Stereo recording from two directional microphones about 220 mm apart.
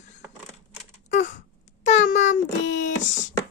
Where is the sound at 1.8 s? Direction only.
35° left (ahead or behind).